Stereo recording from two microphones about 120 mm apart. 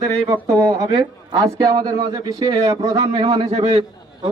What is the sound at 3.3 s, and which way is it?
Speech, 55° right (ahead or behind).